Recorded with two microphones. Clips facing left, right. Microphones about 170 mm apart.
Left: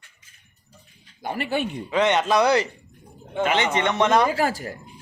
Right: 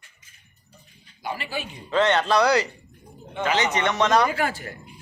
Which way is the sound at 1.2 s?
55° left (ahead or behind).